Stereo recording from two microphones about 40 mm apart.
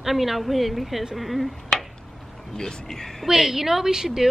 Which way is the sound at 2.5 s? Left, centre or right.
Centre.